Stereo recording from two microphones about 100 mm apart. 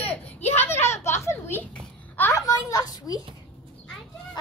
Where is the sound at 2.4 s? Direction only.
40° left (ahead or behind).